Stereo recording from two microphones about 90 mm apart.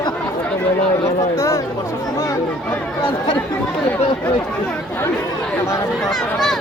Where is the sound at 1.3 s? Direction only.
35° left (ahead or behind).